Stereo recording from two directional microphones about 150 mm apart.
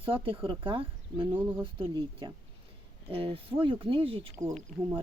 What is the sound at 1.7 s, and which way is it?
Speech, 35° right (ahead or behind).